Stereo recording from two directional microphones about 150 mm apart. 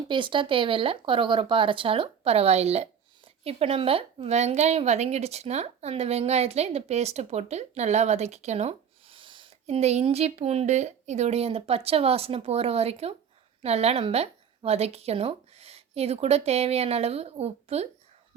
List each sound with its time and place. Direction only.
0.1 s a woman's voice: 35° right (ahead or behind)